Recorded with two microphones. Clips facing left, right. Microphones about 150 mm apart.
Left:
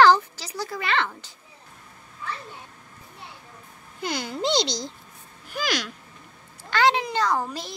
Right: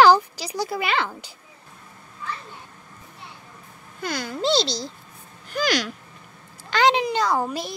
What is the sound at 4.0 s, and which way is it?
Speech, 20° left (ahead or behind).